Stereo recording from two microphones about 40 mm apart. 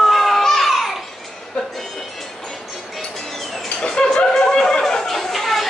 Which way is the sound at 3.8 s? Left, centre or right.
Centre.